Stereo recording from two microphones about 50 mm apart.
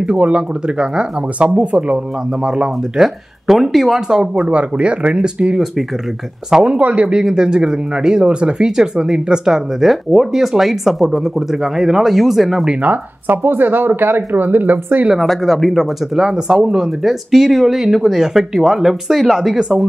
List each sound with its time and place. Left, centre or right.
0.0 s speech: centre
4.5 s speech: right
7.3 s speech: centre
12.8 s speech: right
15.1 s speech: centre